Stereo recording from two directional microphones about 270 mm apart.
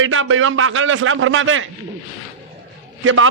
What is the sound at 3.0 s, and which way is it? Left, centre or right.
Speech, right.